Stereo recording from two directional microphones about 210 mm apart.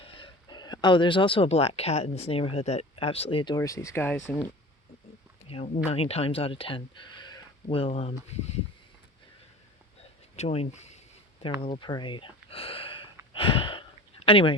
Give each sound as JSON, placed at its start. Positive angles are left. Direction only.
{"t": 0.0, "sound": "speech", "side_deg": 20}
{"t": 5.5, "sound": "speech", "side_deg": 30}
{"t": 10.3, "sound": "speech", "side_deg": 30}
{"t": 13.3, "sound": "a sound", "side_deg": 25}